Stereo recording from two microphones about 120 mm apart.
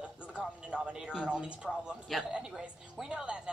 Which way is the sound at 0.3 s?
5° right (ahead or behind).